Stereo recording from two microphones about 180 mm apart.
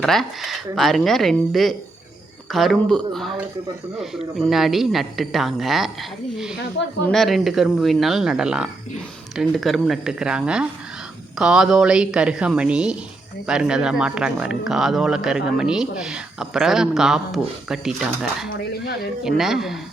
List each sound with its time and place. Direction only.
0.0 s speech: centre (ahead or behind)